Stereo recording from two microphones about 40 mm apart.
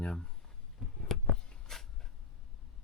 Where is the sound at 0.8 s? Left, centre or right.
Centre.